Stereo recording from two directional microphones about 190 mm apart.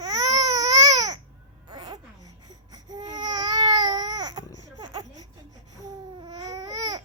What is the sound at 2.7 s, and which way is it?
Babbling, 20° right (ahead or behind).